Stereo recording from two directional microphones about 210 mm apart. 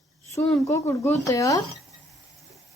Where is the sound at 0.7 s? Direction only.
15° left (ahead or behind).